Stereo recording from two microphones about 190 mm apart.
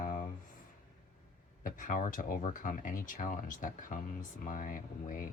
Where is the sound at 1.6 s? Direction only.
45° left (ahead or behind).